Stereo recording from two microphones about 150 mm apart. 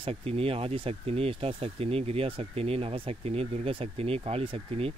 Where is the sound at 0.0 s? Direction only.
40° right (ahead or behind).